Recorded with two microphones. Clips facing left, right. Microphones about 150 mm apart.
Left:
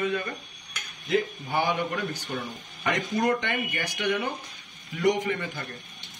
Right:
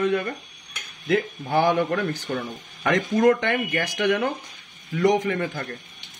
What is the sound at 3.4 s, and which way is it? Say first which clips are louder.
Speech: right 6 dB; 55° right (ahead or behind).